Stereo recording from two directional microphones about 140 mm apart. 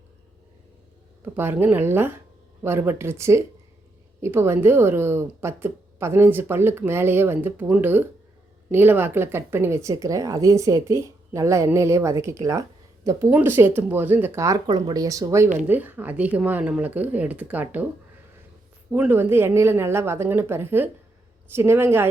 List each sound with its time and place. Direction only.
1.2 s a woman's voice: 15° right (ahead or behind)
18.9 s a woman's voice: 10° right (ahead or behind)